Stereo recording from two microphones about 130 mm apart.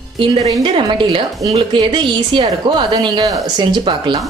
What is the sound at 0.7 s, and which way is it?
A woman's voice, 40° right (ahead or behind).